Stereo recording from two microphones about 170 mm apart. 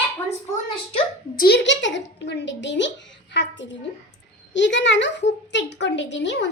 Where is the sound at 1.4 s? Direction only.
85° left.